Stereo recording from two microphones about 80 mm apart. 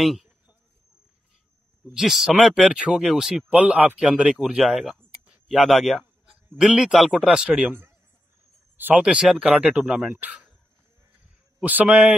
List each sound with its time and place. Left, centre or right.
0.0 s speech: centre
2.0 s speech: centre
3.4 s a man's voice: centre
8.7 s speech: right
9.0 s speech: centre
11.6 s speech: centre